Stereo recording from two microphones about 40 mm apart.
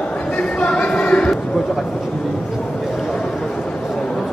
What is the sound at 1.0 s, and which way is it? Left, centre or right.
Run, left.